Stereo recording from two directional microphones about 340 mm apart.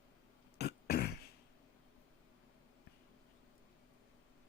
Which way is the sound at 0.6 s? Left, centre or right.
Left.